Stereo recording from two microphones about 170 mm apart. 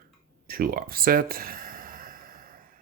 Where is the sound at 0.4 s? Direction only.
60° right (ahead or behind).